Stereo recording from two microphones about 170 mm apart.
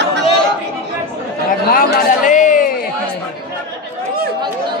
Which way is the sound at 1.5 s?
55° left (ahead or behind).